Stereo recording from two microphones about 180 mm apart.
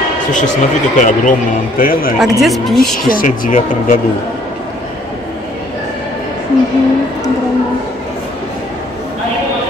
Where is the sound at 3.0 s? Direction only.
50° left (ahead or behind).